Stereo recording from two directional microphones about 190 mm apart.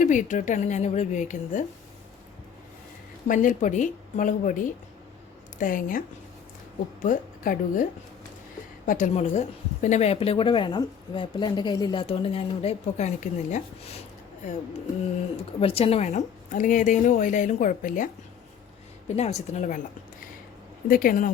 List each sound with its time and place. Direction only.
0.0 s a woman's voice: 40° left (ahead or behind)
3.2 s a woman's voice: 45° left (ahead or behind)
7.0 s a woman's voice: 45° left (ahead or behind)
8.9 s a woman's voice: 40° left (ahead or behind)
15.6 s a woman's voice: 30° left (ahead or behind)
20.8 s a woman's voice: 50° left (ahead or behind)